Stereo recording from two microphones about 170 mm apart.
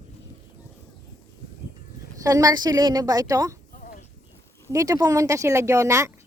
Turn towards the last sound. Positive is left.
turn(degrees=-15)  # may be behind; listen again after turning